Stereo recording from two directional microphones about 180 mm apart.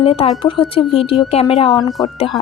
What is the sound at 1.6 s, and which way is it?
Speech, 20° left (ahead or behind).